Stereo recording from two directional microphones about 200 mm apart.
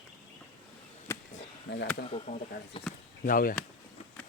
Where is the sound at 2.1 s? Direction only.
30° left (ahead or behind).